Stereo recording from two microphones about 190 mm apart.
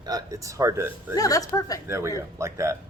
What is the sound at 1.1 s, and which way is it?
Speech, 20° left (ahead or behind).